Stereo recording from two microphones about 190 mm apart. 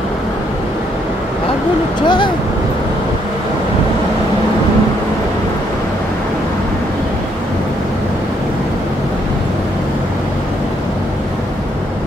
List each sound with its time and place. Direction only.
2.0 s speech: 25° left (ahead or behind)